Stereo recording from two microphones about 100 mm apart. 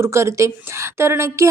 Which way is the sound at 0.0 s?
30° right (ahead or behind).